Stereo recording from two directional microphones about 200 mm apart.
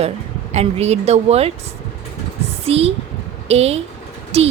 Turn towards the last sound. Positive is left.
turn(degrees=-30)  # may be behind; listen again after turning